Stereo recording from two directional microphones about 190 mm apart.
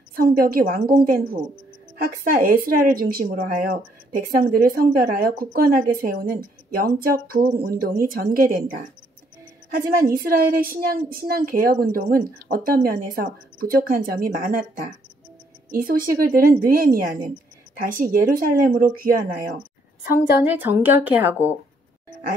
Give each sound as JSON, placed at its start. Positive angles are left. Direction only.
{"t": 0.1, "sound": "speech", "side_deg": -50}
{"t": 10.0, "sound": "speech", "side_deg": -50}
{"t": 15.7, "sound": "speech", "side_deg": -50}
{"t": 20.4, "sound": "a woman's voice", "side_deg": -10}